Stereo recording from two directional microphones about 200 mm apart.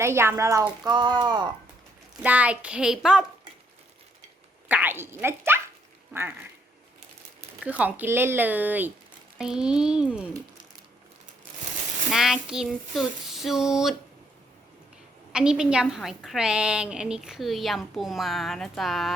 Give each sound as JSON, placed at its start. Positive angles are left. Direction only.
{"t": 0.0, "sound": "speech", "side_deg": -15}
{"t": 2.2, "sound": "a woman's voice", "side_deg": -5}
{"t": 4.7, "sound": "speech", "side_deg": -10}
{"t": 7.6, "sound": "a woman's voice", "side_deg": -5}
{"t": 12.1, "sound": "a woman's voice", "side_deg": 0}
{"t": 15.3, "sound": "a woman's voice", "side_deg": -5}